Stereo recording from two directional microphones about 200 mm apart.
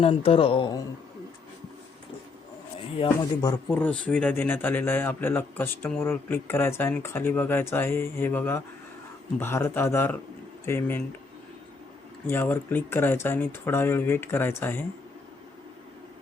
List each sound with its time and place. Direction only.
0.0 s speech: 30° left (ahead or behind)
3.4 s a man's voice: 10° left (ahead or behind)
12.3 s a man's voice: 10° left (ahead or behind)